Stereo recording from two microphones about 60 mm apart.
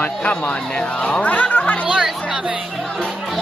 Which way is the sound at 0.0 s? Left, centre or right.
Centre.